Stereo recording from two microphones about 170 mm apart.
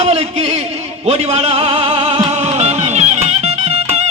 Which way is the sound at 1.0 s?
35° right (ahead or behind).